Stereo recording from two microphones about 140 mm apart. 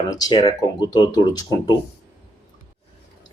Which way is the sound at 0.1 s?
30° left (ahead or behind).